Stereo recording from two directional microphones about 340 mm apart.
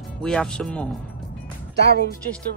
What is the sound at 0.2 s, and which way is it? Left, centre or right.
Speech, centre.